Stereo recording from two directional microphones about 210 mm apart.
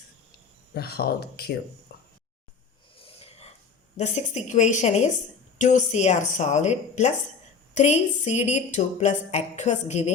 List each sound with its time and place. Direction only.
0.7 s speech: 45° left (ahead or behind)
1.9 s a sound: 45° left (ahead or behind)
3.0 s snort: 25° left (ahead or behind)
3.9 s a woman's voice: 35° left (ahead or behind)